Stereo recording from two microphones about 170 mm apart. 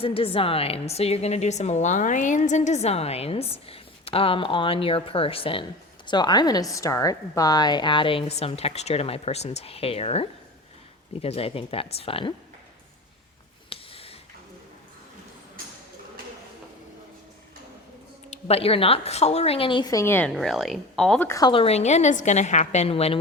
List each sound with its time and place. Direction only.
0.0 s a woman's voice: 35° left (ahead or behind)
13.7 s a sound: 35° left (ahead or behind)
18.3 s a woman's voice: 35° left (ahead or behind); by 20.3 s 15° left (ahead or behind)
20.3 s speech: centre (ahead or behind)
21.2 s speech: 20° left (ahead or behind)
21.5 s a woman's voice: 35° left (ahead or behind)